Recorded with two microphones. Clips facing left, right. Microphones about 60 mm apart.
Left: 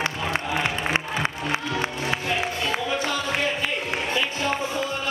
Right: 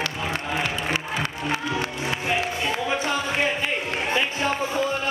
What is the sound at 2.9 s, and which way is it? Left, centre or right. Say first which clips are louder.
Music: right 1 dB; right.